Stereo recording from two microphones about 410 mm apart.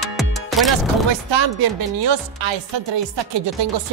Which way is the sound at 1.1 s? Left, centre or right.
Right.